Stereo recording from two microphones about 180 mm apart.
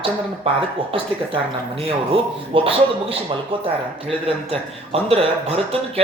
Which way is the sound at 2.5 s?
30° right (ahead or behind).